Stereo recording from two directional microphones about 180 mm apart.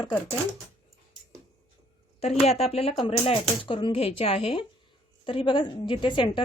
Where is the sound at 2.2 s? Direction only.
35° left (ahead or behind).